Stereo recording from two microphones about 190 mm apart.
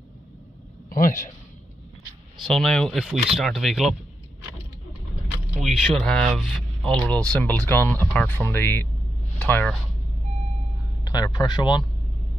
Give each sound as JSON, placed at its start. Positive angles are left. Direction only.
{"t": 0.8, "sound": "a sound", "side_deg": 45}
{"t": 2.4, "sound": "speech", "side_deg": 0}
{"t": 5.6, "sound": "speech", "side_deg": 0}
{"t": 11.1, "sound": "speech", "side_deg": 20}